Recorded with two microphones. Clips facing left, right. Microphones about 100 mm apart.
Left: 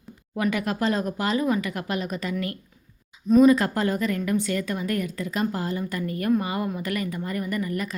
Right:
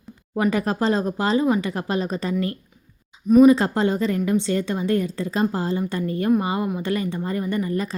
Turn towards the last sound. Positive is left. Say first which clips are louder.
# right 4 dB
turn(degrees=-30)  # may be behind; listen again after turning